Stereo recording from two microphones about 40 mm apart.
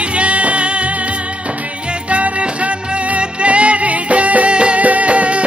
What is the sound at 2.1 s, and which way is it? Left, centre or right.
Music, right.